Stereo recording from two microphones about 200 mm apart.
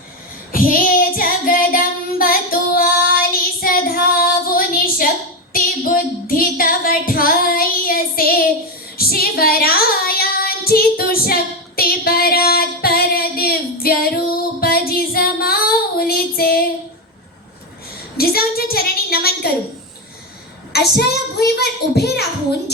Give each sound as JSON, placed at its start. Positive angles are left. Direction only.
{"t": 0.5, "sound": "child singing", "side_deg": 45}
{"t": 5.5, "sound": "female singing", "side_deg": 45}
{"t": 9.0, "sound": "child singing", "side_deg": 50}
{"t": 11.8, "sound": "a sound", "side_deg": 50}
{"t": 18.2, "sound": "a sound", "side_deg": 50}
{"t": 20.7, "sound": "child singing", "side_deg": 50}